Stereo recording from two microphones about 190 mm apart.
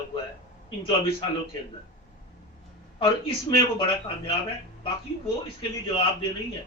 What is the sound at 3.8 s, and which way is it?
Speech, 30° left (ahead or behind).